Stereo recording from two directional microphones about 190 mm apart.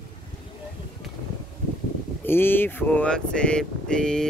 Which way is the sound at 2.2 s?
10° left (ahead or behind).